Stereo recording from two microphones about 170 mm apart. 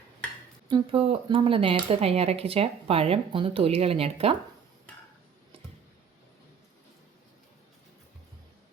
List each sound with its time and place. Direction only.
0.7 s speech: 35° right (ahead or behind)